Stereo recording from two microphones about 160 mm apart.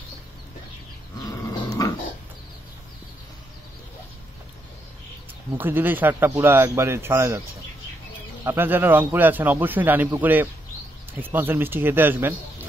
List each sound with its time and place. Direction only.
1.2 s goat: 20° left (ahead or behind)
5.6 s a man's voice: 10° right (ahead or behind)
8.5 s a man's voice: 15° right (ahead or behind)